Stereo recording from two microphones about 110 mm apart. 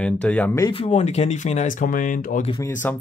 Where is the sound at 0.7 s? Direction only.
65° left (ahead or behind); by 1.7 s 90° left.